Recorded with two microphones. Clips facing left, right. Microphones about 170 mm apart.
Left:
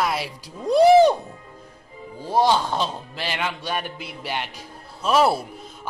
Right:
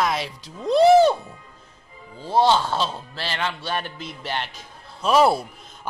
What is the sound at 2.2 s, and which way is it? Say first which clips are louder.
A man's voice: right 1 dB; 10° left (ahead or behind).